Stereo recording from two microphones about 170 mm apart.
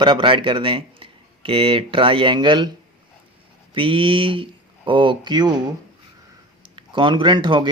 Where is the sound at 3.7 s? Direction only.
30° right (ahead or behind).